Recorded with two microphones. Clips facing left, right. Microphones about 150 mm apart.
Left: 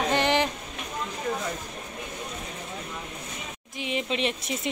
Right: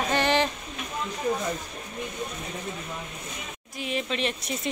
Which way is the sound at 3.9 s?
20° left (ahead or behind).